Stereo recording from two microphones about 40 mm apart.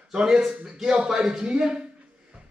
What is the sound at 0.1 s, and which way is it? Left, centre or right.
A man's voice, centre.